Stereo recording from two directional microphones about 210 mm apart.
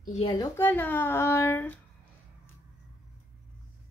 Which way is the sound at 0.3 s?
15° left (ahead or behind).